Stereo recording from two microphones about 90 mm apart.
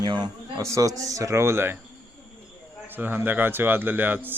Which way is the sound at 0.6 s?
35° right (ahead or behind).